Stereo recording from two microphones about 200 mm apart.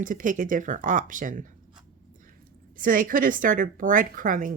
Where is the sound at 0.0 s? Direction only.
40° right (ahead or behind).